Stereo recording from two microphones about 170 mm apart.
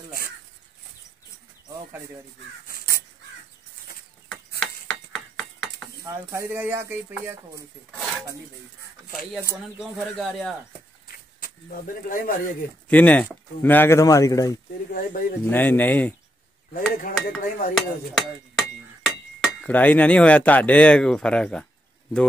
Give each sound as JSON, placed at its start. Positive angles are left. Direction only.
{"t": 4.6, "sound": "mechanisms", "side_deg": 5}
{"t": 6.0, "sound": "speech", "side_deg": -15}
{"t": 9.8, "sound": "speech", "side_deg": 0}
{"t": 11.1, "sound": "speech", "side_deg": 55}
{"t": 12.8, "sound": "speech", "side_deg": 10}
{"t": 14.9, "sound": "speech", "side_deg": 55}
{"t": 15.5, "sound": "speech", "side_deg": 10}
{"t": 16.9, "sound": "speech", "side_deg": 55}
{"t": 17.7, "sound": "a sound", "side_deg": 0}
{"t": 19.4, "sound": "speech", "side_deg": 5}